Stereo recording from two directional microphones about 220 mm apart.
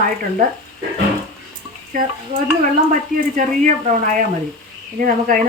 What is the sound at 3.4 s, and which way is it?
Speech, 35° right (ahead or behind).